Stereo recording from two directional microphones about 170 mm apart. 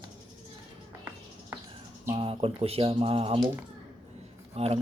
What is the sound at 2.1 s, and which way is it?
Speech, 35° right (ahead or behind).